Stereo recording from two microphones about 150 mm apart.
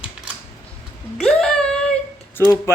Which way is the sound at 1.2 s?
Centre (ahead or behind).